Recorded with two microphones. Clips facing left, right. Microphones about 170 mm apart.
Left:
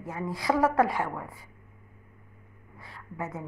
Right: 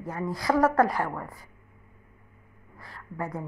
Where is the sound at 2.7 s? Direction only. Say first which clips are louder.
Right 2 dB; 5° left (ahead or behind).